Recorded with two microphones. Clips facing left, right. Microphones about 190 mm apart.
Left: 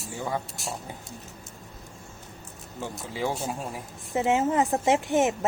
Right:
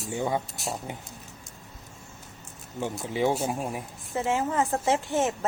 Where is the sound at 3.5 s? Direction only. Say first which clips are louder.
Right 3 dB; 20° right (ahead or behind).